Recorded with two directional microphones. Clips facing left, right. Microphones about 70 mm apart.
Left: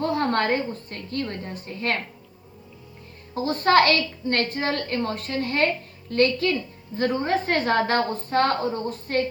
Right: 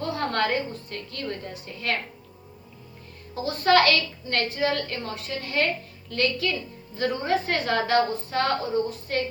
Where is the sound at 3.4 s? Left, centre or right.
Left.